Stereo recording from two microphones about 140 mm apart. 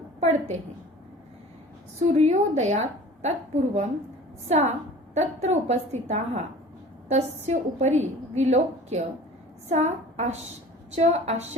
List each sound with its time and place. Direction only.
0.2 s a woman's voice: 55° right (ahead or behind)
2.0 s a woman's voice: 55° right (ahead or behind)